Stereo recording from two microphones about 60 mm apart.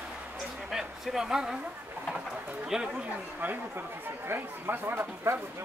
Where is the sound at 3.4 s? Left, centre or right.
Right.